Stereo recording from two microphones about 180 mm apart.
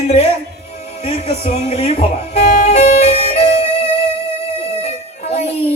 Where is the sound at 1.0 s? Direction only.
35° left (ahead or behind).